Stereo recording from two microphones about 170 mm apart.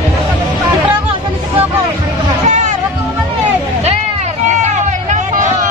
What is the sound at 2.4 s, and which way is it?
Hubbub, 45° right (ahead or behind).